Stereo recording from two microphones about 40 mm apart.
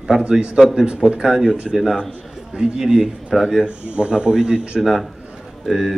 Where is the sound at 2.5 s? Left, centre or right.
Centre.